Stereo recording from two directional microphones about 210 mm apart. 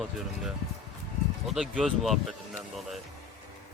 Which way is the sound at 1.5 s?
Centre (ahead or behind).